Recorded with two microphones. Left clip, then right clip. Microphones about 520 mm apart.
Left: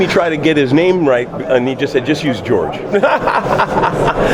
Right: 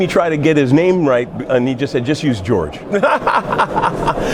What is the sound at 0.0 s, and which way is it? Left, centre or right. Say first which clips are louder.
Speech: left 1 dB; right.